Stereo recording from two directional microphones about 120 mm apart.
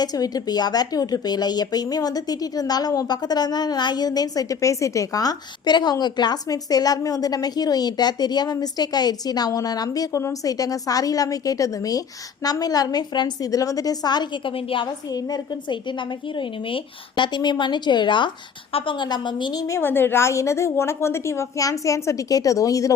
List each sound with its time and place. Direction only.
0.0 s a woman's voice: 35° left (ahead or behind)
14.5 s a woman's voice: 45° left (ahead or behind)
19.6 s a woman's voice: 20° left (ahead or behind)